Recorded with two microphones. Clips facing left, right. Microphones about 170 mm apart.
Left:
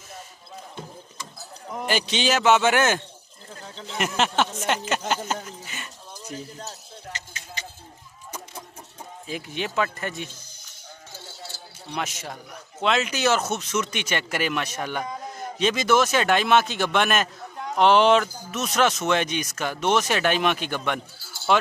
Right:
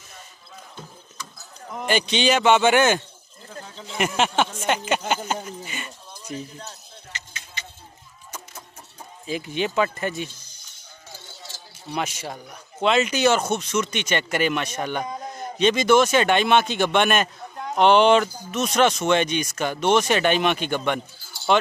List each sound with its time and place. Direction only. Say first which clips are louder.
1.7 s speech: right 2 dB; 5° left (ahead or behind)
6.2 s a sound: right 2 dB; 40° left (ahead or behind)
9.2 s speech: right 5 dB; centre (ahead or behind)
11.9 s speech: right 3 dB; centre (ahead or behind)